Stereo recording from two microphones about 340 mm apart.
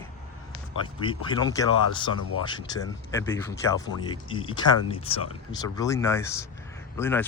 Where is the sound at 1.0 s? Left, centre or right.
Centre.